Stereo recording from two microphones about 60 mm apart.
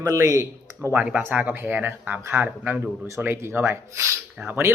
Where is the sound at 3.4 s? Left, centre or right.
Right.